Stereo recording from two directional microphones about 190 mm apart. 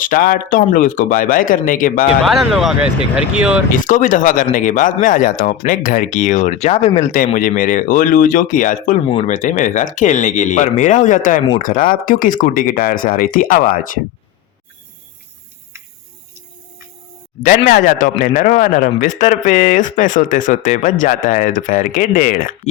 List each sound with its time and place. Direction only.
0.0 s speech: 45° left (ahead or behind)
2.2 s speech: centre (ahead or behind)
3.7 s speech: 45° left (ahead or behind)
17.4 s speech: 45° left (ahead or behind)